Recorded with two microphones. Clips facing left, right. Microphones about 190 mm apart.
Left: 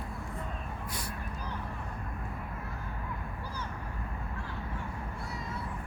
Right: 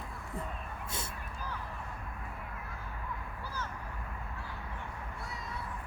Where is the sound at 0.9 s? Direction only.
25° right (ahead or behind).